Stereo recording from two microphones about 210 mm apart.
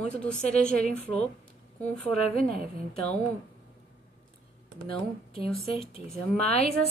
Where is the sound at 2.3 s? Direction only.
40° right (ahead or behind).